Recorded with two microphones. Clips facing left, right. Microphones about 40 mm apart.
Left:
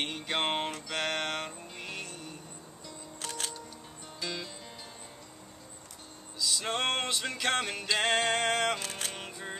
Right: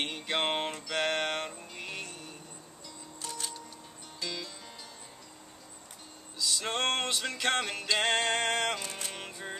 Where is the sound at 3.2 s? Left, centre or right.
Left.